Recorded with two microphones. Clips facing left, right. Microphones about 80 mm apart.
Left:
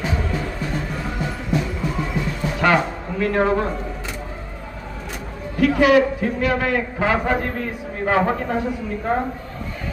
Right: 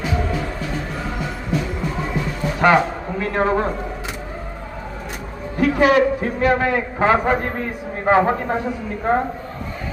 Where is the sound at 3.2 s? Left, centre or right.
Right.